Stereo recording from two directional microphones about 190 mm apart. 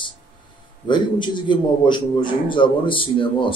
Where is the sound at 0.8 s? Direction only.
25° left (ahead or behind).